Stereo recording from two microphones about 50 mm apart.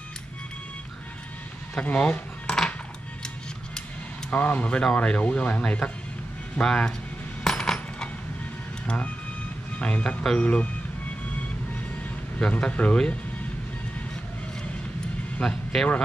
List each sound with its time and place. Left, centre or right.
1.8 s dishes: left
4.3 s speech: left
7.4 s coin: centre
8.8 s speech: left
12.4 s speech: left
15.4 s speech: centre